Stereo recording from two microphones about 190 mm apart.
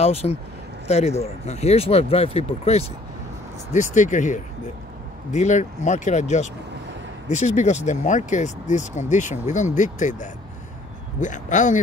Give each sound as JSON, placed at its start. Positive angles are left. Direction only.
{"t": 0.0, "sound": "speech", "side_deg": 35}